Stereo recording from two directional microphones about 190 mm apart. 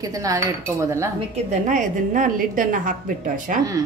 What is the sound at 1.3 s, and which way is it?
A woman's voice, 40° right (ahead or behind).